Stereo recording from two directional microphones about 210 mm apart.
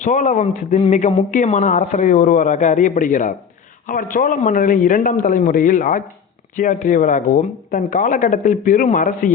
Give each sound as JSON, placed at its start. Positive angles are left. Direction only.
{"t": 0.0, "sound": "speech", "side_deg": 35}